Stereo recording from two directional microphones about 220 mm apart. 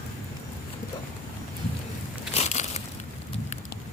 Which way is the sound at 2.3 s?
30° left (ahead or behind).